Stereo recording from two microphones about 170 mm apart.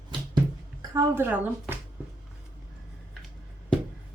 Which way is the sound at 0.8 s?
15° right (ahead or behind).